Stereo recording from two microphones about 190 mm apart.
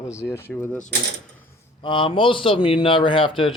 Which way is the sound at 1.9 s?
25° left (ahead or behind).